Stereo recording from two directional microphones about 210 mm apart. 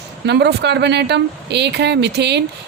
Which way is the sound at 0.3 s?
55° right (ahead or behind).